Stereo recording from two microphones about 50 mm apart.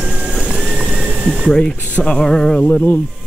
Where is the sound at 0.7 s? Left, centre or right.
Right.